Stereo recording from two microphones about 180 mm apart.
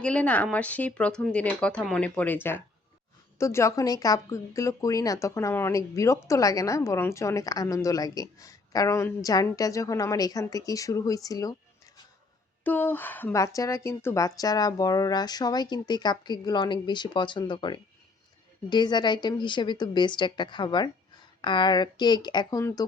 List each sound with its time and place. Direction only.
0.0 s a woman's voice: 5° left (ahead or behind)
12.6 s a woman's voice: 10° left (ahead or behind)